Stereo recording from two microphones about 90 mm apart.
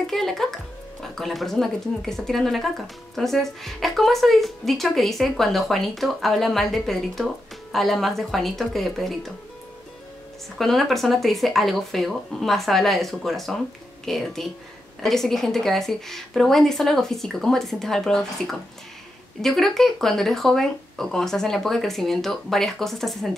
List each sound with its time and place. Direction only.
0.0 s a woman's voice: 5° left (ahead or behind)
10.6 s a woman's voice: centre (ahead or behind)